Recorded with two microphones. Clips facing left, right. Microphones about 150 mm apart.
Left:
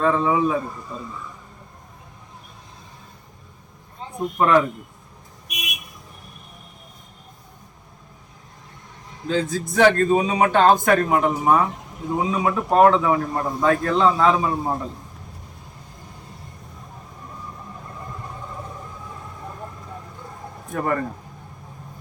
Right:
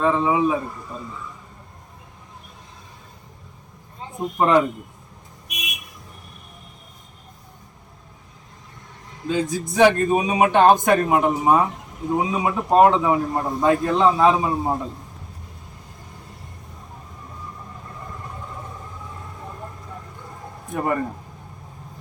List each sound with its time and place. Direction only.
0.0 s speech: 15° right (ahead or behind)
4.4 s speech: 20° right (ahead or behind)
9.3 s speech: 15° right (ahead or behind)
20.7 s speech: 15° right (ahead or behind)